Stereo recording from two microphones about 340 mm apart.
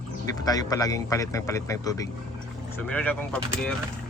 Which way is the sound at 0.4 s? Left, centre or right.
Centre.